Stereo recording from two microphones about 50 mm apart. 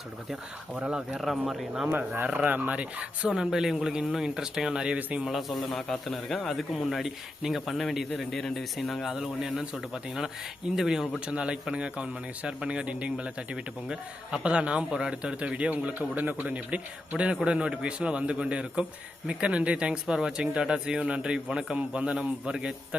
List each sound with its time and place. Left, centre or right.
0.8 s a man's voice: right
1.1 s a man's voice: centre
2.2 s a man's voice: right
3.4 s a man's voice: centre
5.2 s a man's voice: centre
9.0 s a man's voice: centre
11.3 s a man's voice: right